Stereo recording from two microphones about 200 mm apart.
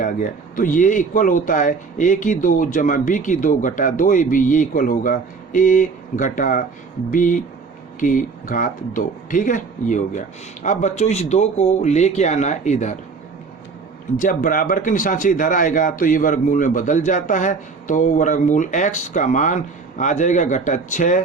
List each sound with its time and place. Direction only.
0.0 s a man's voice: 40° left (ahead or behind)
14.2 s a man's voice: 40° left (ahead or behind)